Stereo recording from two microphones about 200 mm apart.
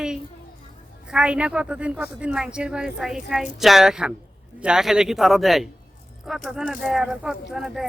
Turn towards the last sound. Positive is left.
turn(degrees=0)  # may be behind; listen again after turning